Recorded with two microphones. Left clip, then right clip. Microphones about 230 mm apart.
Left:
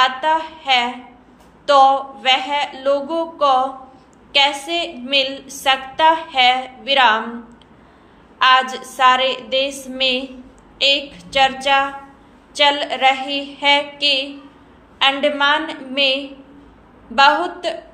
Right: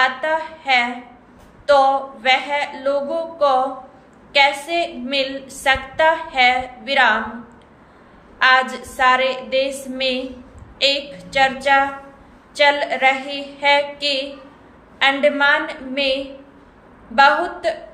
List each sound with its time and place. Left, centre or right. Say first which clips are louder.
0.0 s a woman's voice: left 2 dB; centre
8.4 s a woman's voice: left 1 dB; centre